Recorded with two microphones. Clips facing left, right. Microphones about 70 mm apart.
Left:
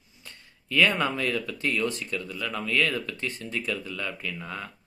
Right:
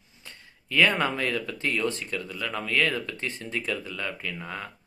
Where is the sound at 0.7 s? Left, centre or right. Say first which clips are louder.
Right 1 dB; right.